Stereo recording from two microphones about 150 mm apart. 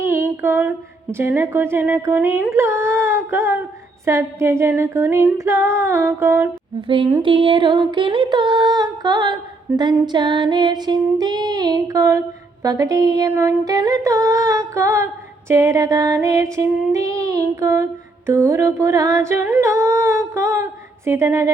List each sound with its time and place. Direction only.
0.1 s a sound: 15° right (ahead or behind)
1.1 s speech: 15° right (ahead or behind)
7.2 s music: 35° right (ahead or behind); by 21.5 s 20° right (ahead or behind)